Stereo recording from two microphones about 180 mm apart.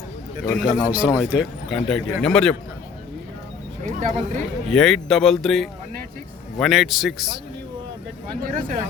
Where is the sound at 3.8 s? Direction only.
45° right (ahead or behind).